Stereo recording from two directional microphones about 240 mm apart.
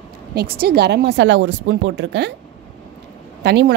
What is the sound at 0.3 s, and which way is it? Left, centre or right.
Speech, right.